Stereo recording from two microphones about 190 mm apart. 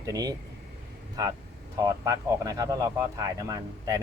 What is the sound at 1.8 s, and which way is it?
Speech, 20° right (ahead or behind).